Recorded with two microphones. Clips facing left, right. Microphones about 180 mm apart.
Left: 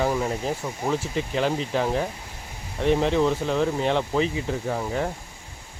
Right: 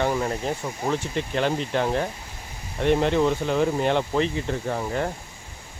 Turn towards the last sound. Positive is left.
turn(degrees=0)  # may be behind; listen again after turning